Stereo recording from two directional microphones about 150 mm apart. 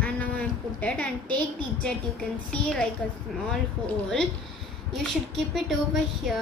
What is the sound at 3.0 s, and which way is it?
Speech, 5° left (ahead or behind).